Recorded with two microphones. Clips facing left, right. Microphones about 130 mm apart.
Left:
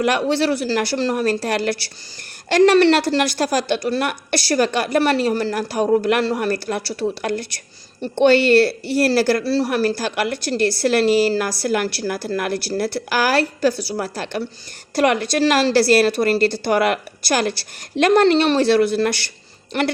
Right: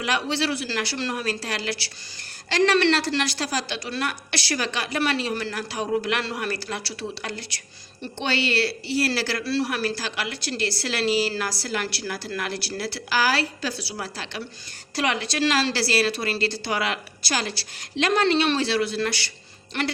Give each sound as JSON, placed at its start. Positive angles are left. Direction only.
{"t": 0.0, "sound": "a woman's voice", "side_deg": 50}